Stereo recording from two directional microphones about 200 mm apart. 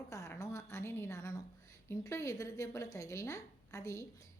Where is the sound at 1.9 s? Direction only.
15° left (ahead or behind).